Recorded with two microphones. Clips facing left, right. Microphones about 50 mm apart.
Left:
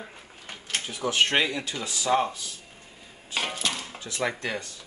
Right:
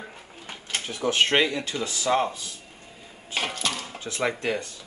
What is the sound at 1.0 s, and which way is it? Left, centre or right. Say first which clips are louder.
Speech: right 2 dB; right.